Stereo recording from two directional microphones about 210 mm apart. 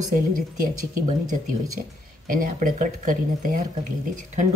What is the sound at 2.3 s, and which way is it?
Speech, 40° right (ahead or behind).